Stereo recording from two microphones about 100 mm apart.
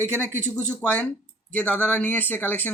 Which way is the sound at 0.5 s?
15° left (ahead or behind).